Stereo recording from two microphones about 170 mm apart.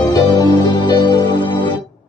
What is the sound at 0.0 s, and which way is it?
Music, 25° left (ahead or behind).